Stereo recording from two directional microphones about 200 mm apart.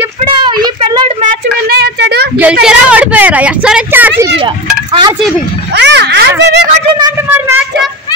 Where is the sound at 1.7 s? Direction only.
55° right (ahead or behind).